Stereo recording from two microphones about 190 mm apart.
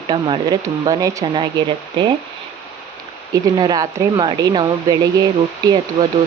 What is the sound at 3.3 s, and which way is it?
Speech, 20° right (ahead or behind).